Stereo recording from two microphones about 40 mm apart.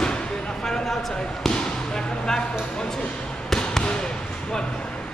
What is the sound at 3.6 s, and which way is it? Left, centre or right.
Basketball bounce, left.